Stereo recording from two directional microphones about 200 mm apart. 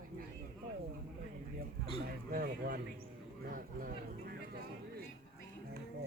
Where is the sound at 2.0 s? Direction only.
50° right (ahead or behind).